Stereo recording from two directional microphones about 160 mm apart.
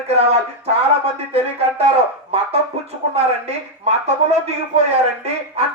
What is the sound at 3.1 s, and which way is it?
Speech, 40° right (ahead or behind).